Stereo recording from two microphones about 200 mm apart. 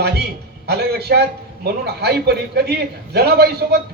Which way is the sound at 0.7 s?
55° right (ahead or behind).